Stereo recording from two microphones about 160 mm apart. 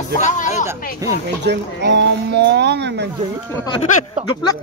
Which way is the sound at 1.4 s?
90° right.